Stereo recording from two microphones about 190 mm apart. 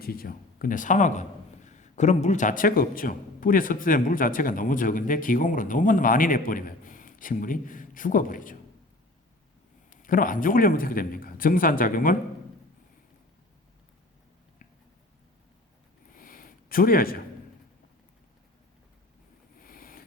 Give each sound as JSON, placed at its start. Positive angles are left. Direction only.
{"t": 0.0, "sound": "speech", "side_deg": 50}
{"t": 9.9, "sound": "speech", "side_deg": 45}
{"t": 16.1, "sound": "a sound", "side_deg": 45}
{"t": 19.6, "sound": "vehicle", "side_deg": 50}